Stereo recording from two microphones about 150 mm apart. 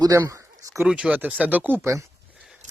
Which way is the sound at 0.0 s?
25° right (ahead or behind).